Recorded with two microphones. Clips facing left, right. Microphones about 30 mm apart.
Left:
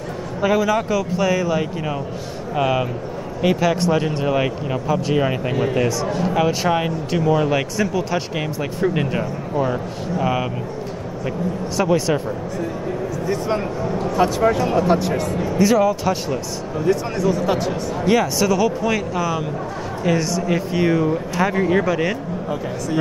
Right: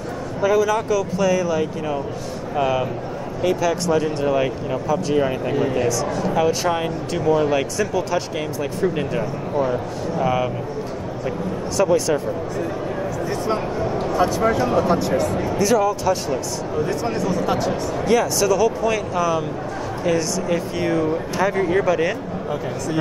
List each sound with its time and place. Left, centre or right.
0.4 s speech: centre
11.7 s speech: centre
14.1 s speech: centre
15.6 s speech: centre
16.8 s speech: centre
18.0 s speech: centre